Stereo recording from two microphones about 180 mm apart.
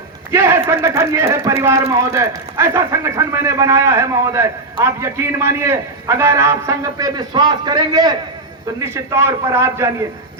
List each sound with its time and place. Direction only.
0.3 s a man's voice: 15° right (ahead or behind)